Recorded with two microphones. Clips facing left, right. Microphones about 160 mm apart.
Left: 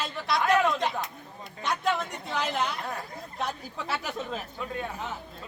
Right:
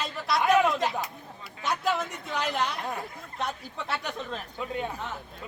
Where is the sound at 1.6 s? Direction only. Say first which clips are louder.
Even; centre (ahead or behind).